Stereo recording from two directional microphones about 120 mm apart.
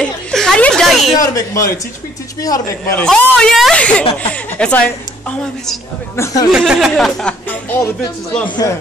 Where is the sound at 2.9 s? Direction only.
10° left (ahead or behind).